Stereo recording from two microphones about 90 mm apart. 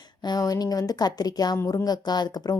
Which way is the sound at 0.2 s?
45° left (ahead or behind).